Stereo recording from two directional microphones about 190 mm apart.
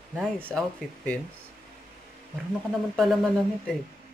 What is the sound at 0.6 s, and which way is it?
Speech, 5° left (ahead or behind).